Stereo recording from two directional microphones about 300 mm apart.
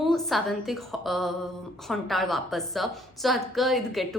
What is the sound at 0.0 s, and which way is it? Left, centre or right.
A woman's voice, centre.